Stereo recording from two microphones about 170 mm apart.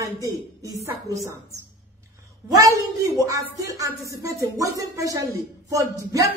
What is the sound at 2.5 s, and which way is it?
A woman's voice, 20° right (ahead or behind).